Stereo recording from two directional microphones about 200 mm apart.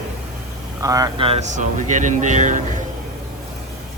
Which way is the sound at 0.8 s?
20° right (ahead or behind).